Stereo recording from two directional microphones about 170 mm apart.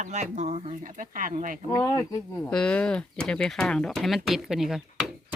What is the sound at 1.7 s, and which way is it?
Speech, 20° left (ahead or behind).